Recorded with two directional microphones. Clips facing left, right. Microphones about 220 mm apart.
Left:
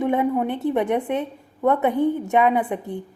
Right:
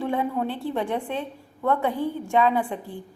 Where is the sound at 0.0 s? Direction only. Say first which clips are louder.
Left 5 dB; 20° left (ahead or behind).